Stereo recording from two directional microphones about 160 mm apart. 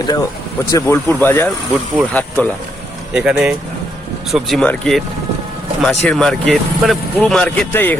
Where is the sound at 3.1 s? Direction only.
5° right (ahead or behind).